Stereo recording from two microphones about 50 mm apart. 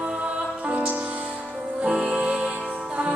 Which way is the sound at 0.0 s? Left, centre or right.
Centre.